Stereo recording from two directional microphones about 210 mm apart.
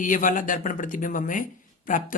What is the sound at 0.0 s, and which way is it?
Speech, 40° left (ahead or behind).